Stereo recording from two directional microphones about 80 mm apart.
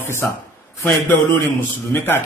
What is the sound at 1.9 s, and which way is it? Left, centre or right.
Speech, left.